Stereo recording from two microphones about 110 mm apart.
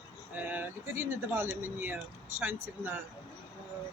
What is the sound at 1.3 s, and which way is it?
A man's voice, 20° right (ahead or behind).